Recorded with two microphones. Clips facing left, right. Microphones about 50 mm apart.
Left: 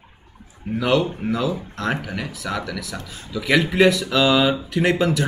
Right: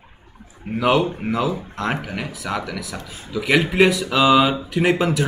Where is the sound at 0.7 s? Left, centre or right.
Centre.